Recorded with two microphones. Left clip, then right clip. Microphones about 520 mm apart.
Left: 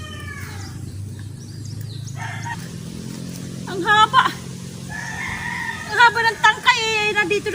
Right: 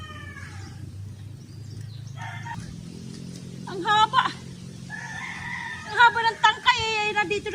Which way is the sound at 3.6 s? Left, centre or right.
Right.